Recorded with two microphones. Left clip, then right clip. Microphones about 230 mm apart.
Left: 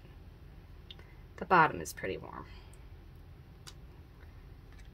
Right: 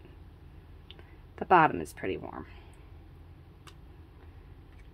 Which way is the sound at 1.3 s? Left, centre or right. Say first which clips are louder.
Right 3 dB; right.